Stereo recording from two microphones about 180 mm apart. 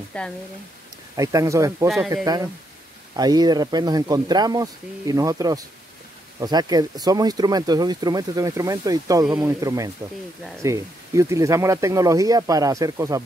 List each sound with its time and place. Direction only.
0.1 s speech: 5° left (ahead or behind)
1.1 s speech: 20° right (ahead or behind)